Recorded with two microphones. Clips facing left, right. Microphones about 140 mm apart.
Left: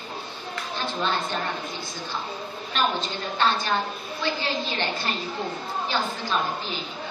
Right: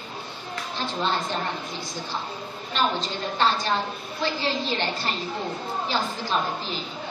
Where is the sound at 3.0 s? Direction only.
35° right (ahead or behind).